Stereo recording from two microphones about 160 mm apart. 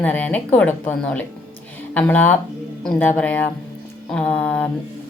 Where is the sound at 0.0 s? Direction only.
10° left (ahead or behind).